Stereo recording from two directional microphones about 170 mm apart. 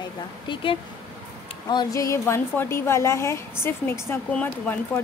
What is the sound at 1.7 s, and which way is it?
A woman's voice, 20° left (ahead or behind).